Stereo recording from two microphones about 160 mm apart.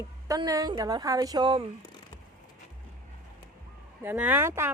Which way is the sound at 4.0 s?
10° right (ahead or behind).